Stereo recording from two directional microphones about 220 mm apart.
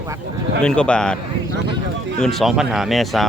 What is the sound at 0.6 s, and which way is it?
Speech, 5° left (ahead or behind).